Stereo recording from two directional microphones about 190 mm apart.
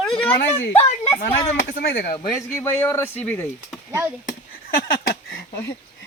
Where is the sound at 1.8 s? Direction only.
55° left (ahead or behind).